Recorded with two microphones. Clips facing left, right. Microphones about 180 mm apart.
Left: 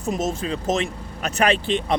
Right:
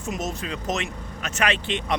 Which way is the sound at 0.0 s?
30° left (ahead or behind).